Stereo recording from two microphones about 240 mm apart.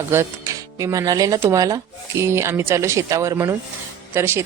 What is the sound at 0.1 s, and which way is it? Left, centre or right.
Speech, centre.